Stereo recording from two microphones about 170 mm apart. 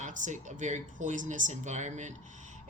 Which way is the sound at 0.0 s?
45° right (ahead or behind).